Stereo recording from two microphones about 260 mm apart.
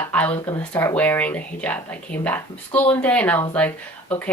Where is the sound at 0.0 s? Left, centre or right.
Centre.